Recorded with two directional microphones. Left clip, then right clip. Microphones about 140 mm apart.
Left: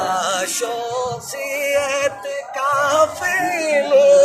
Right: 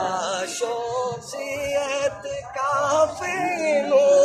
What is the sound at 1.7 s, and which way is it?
Music, 25° right (ahead or behind).